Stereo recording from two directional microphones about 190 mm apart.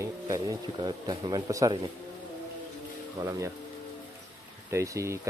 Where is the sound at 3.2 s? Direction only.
20° right (ahead or behind).